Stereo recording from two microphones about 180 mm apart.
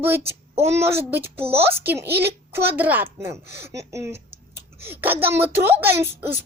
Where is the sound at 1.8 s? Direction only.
10° right (ahead or behind).